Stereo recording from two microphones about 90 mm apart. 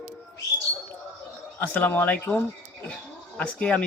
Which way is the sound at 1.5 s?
20° left (ahead or behind).